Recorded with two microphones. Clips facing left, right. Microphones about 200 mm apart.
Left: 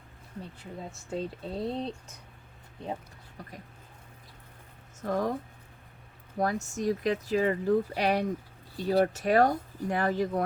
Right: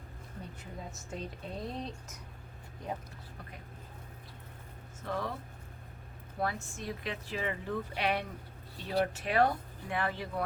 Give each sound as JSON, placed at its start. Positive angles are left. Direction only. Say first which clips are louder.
{"t": 0.6, "sound": "speech", "louder": "left 4 dB", "side_deg": 30}
{"t": 5.0, "sound": "speech", "louder": "left 7 dB", "side_deg": 45}
{"t": 6.4, "sound": "speech", "louder": "left 7 dB", "side_deg": 45}